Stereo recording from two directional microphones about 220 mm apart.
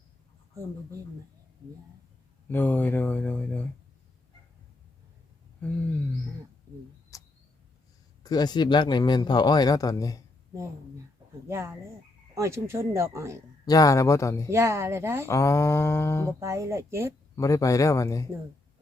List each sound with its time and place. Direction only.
2.5 s speech: 10° left (ahead or behind)
5.5 s a sound: 5° left (ahead or behind)
7.1 s a sound: 15° left (ahead or behind)
8.2 s speech: 20° left (ahead or behind)
10.5 s speech: 10° right (ahead or behind)
13.7 s speech: 15° left (ahead or behind)
14.5 s speech: 10° right (ahead or behind)
15.3 s speech: 15° left (ahead or behind)
16.4 s speech: 15° right (ahead or behind)
17.3 s speech: 15° left (ahead or behind)